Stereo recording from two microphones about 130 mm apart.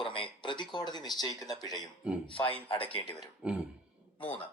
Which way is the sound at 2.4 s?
45° left (ahead or behind).